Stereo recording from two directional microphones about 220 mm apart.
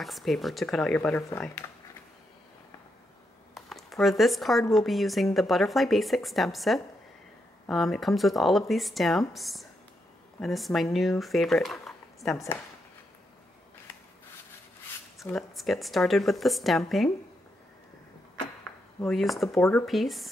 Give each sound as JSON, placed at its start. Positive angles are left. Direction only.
{"t": 0.0, "sound": "speech", "side_deg": 0}
{"t": 3.5, "sound": "speech", "side_deg": 0}
{"t": 15.2, "sound": "speech", "side_deg": 0}
{"t": 19.0, "sound": "speech", "side_deg": 0}